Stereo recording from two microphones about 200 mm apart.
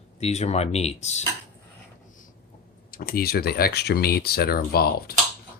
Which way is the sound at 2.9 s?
50° left (ahead or behind).